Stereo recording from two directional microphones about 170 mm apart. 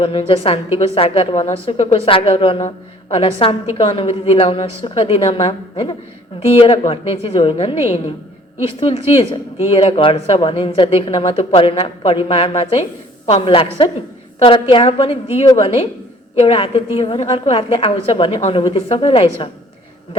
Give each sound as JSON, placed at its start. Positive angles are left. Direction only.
{"t": 0.0, "sound": "speech", "side_deg": 35}